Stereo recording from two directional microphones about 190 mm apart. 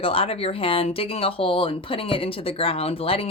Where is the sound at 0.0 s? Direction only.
30° left (ahead or behind).